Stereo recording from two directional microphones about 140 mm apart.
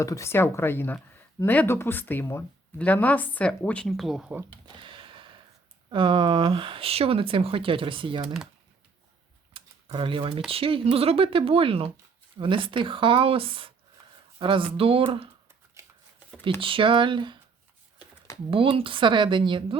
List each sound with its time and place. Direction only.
0.0 s speech: 20° left (ahead or behind); by 4.4 s centre (ahead or behind)
4.6 s a sound: 35° right (ahead or behind)
5.9 s speech: 35° right (ahead or behind)
9.5 s typing: 40° right (ahead or behind)
10.5 s speech: 40° right (ahead or behind)
16.6 s speech: 40° right (ahead or behind)
18.5 s speech: 40° right (ahead or behind)